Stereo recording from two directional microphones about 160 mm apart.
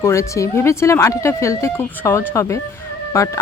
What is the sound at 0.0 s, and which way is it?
Speech, 20° left (ahead or behind).